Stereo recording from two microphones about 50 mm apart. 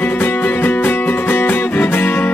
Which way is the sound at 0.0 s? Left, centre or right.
Left.